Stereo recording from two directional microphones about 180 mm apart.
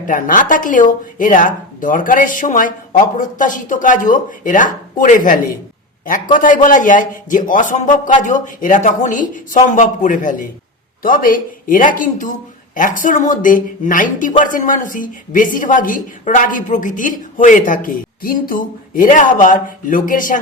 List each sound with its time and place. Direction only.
0.0 s speech: 45° left (ahead or behind)